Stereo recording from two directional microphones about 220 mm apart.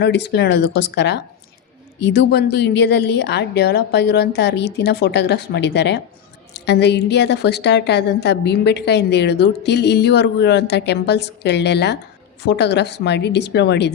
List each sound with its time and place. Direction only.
0.0 s a woman's voice: 50° left (ahead or behind)